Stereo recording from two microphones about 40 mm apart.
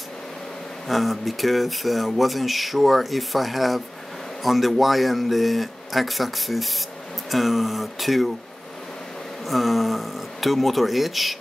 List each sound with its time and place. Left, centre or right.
0.8 s speech: centre
9.5 s speech: centre